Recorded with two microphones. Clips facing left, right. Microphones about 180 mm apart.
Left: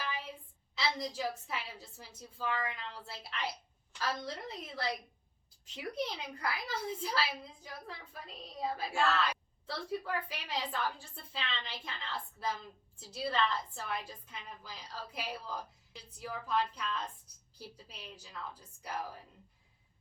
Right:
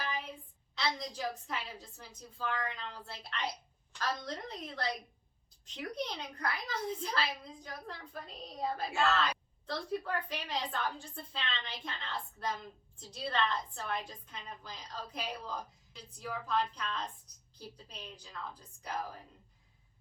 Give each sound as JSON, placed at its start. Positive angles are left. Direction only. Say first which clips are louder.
{"t": 0.8, "sound": "a woman's voice", "louder": "left 1 dB", "side_deg": 5}
{"t": 13.0, "sound": "a woman's voice", "louder": "left 1 dB", "side_deg": 5}